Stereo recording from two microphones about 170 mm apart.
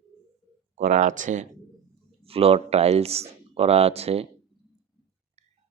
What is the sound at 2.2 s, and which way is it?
Speech, 35° right (ahead or behind).